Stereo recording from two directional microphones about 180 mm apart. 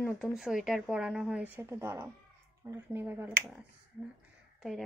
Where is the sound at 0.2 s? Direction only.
5° right (ahead or behind).